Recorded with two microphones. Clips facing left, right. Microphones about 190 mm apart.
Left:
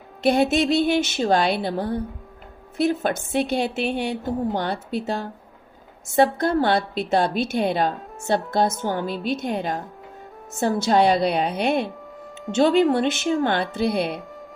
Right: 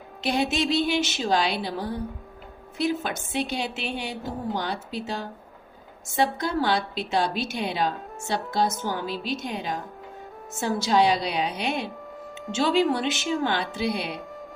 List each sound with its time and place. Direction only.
0.2 s a woman's voice: 55° left (ahead or behind)